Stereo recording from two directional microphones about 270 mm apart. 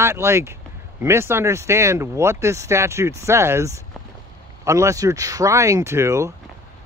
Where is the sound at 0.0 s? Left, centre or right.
Centre.